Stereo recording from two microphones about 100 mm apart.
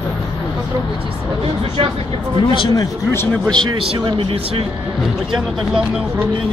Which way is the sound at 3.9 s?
55° right (ahead or behind).